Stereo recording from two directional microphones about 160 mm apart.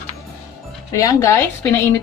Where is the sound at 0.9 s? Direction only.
15° left (ahead or behind).